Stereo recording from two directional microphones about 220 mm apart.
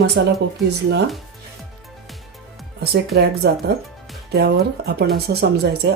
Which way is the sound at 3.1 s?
45° right (ahead or behind).